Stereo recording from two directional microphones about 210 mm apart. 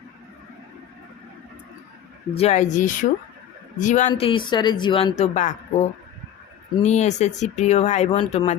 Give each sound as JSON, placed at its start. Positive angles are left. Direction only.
{"t": 2.3, "sound": "speech", "side_deg": 30}
{"t": 6.8, "sound": "speech", "side_deg": 30}